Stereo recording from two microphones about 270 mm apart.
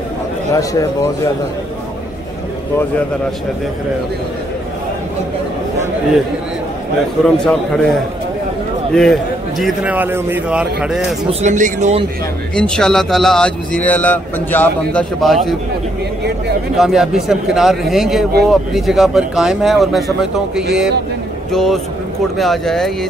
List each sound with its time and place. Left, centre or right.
0.5 s a man's voice: centre
7.3 s speech: centre
11.4 s speech: right
12.5 s speech: centre
16.7 s speech: centre